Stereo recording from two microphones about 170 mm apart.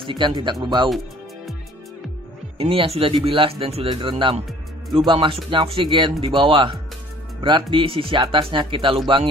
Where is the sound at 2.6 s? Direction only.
35° right (ahead or behind).